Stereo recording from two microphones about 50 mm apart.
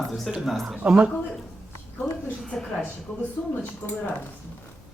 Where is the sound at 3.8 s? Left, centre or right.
Left.